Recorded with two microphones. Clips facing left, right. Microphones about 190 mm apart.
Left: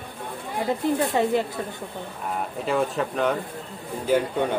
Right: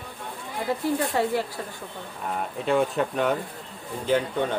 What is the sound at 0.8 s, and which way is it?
Speech, 20° left (ahead or behind).